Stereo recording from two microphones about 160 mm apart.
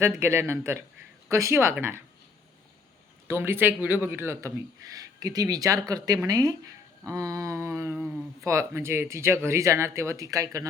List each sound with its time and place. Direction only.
0.2 s speech: 15° right (ahead or behind)
3.2 s speech: 15° right (ahead or behind)
7.9 s speech: 5° right (ahead or behind)
8.4 s speech: 15° right (ahead or behind)